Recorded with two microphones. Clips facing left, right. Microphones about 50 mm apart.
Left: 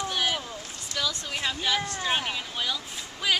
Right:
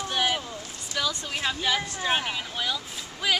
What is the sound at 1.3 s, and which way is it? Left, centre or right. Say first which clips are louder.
Speech: right 1 dB; centre.